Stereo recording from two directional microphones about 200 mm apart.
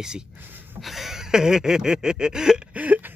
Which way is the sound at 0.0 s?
5° right (ahead or behind).